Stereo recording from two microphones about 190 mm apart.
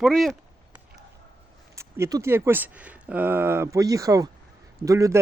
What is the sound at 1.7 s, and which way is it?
Speech, 15° right (ahead or behind).